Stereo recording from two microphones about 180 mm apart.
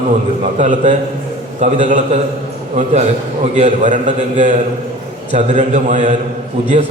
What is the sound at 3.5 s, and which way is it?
A man's voice, 45° right (ahead or behind).